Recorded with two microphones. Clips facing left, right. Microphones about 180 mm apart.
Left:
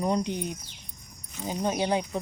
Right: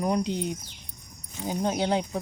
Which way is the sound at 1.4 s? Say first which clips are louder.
Right 2 dB; 15° right (ahead or behind).